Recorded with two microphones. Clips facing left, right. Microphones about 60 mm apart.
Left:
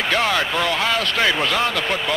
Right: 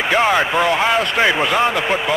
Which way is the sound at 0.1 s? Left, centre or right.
Centre.